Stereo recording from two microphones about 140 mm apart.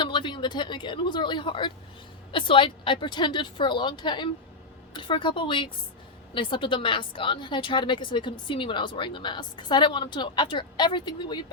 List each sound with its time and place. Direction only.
0.0 s a woman's voice: 35° left (ahead or behind)